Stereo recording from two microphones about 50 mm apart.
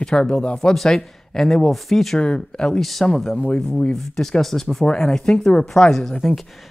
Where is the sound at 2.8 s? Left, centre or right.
Centre.